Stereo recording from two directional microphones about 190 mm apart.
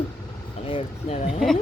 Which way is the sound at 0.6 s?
30° left (ahead or behind).